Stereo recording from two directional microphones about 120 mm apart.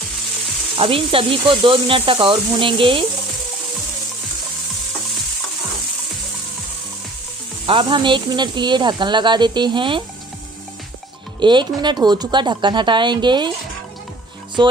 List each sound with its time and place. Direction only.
0.7 s speech: 50° right (ahead or behind)
7.6 s speech: 45° right (ahead or behind)
11.3 s speech: 40° right (ahead or behind)